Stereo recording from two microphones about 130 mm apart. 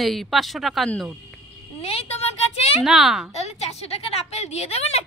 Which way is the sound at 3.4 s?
55° left (ahead or behind).